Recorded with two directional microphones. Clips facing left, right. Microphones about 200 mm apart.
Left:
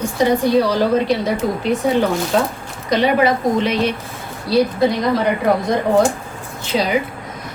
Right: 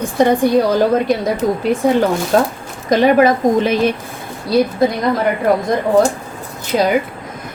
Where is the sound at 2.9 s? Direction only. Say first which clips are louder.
Right 4 dB; 50° right (ahead or behind).